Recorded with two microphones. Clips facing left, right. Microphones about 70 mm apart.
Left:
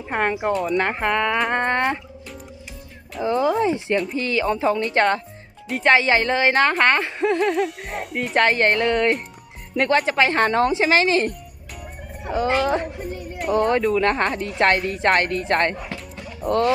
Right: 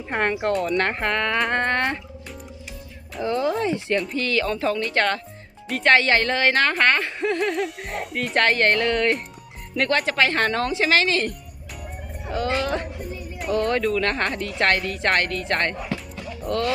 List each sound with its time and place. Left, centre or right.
0.1 s speech: centre
3.2 s speech: centre
3.9 s speech: centre
4.2 s speech: centre
7.2 s speech: centre; by 11.3 s left
12.5 s a woman's voice: left
13.1 s music: left
13.5 s a woman's voice: left
13.9 s speech: left
15.7 s speech: centre
16.5 s speech: left